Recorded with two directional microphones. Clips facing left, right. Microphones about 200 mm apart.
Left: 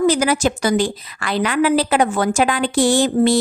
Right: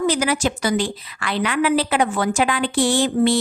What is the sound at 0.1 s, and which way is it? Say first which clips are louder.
A woman's voice: left 3 dB; 45° left (ahead or behind).